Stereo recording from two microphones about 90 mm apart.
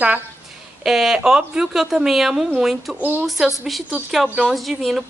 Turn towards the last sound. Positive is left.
turn(degrees=0)  # may be behind; listen again after turning